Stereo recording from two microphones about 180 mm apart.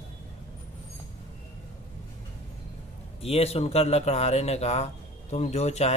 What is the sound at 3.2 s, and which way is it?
Speech, 35° left (ahead or behind).